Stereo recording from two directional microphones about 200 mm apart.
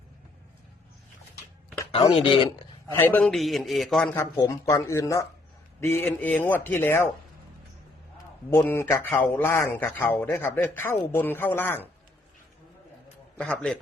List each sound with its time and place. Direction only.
1.9 s speech: 30° left (ahead or behind)
2.9 s a man's voice: 10° left (ahead or behind)
4.1 s speech: 15° left (ahead or behind)
8.4 s speech: 10° left (ahead or behind)
13.4 s a man's voice: 5° left (ahead or behind)